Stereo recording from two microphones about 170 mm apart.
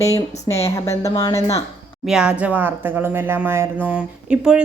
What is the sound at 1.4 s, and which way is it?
Speech, 40° left (ahead or behind).